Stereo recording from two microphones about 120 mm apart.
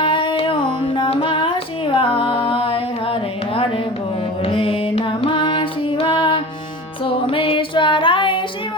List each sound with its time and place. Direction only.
0.0 s music: 45° left (ahead or behind)